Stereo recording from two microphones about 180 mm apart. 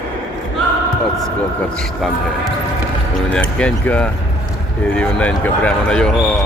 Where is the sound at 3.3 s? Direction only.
5° left (ahead or behind).